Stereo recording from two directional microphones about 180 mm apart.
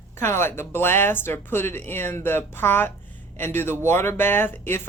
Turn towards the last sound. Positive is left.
turn(degrees=10)  # may be behind; listen again after turning